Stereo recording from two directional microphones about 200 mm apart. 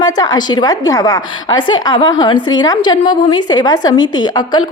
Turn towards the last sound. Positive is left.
turn(degrees=20)  # may be behind; listen again after turning